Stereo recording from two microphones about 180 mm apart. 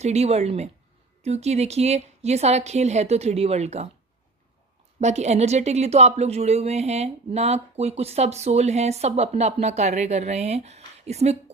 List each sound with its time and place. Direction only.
0.0 s speech: 35° right (ahead or behind)
4.9 s speech: 40° right (ahead or behind)